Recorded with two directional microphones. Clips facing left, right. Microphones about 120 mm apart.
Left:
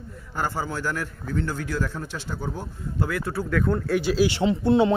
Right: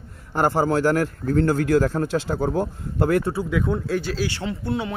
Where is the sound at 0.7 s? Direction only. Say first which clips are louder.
Right 10 dB; 70° right (ahead or behind).